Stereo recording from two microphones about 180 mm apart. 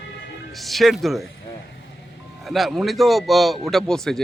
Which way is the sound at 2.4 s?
Centre (ahead or behind).